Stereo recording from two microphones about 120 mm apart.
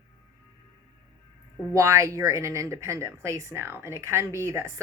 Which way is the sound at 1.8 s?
25° right (ahead or behind).